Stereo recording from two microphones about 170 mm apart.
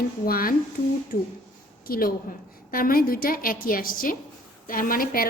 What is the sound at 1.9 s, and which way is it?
A woman's voice, 60° left (ahead or behind).